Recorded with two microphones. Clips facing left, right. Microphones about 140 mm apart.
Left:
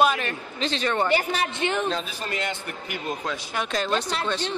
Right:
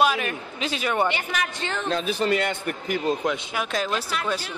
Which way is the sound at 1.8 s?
65° right (ahead or behind).